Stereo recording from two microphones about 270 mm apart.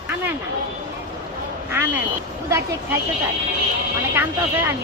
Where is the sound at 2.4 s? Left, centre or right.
Centre.